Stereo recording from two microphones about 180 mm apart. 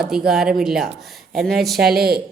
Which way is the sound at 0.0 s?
5° right (ahead or behind).